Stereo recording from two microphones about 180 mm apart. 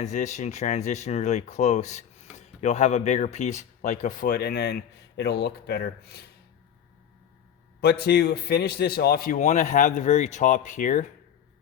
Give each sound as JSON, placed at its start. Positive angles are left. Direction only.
{"t": 0.0, "sound": "speech", "side_deg": 40}
{"t": 7.8, "sound": "a man's voice", "side_deg": 65}